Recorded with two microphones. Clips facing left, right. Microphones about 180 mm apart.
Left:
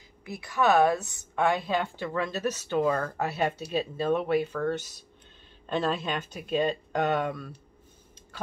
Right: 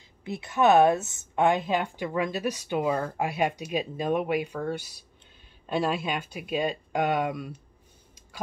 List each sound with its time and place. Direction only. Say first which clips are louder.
0.2 s a woman's voice: right 3 dB; 25° right (ahead or behind)